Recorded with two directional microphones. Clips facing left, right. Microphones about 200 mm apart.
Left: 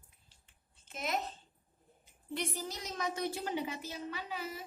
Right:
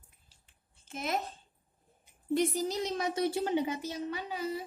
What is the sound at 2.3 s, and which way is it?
A woman's voice, 35° right (ahead or behind).